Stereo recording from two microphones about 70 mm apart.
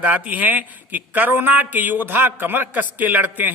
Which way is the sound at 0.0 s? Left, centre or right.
Right.